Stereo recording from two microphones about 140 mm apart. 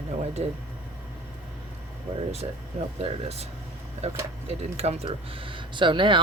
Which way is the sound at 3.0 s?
45° right (ahead or behind).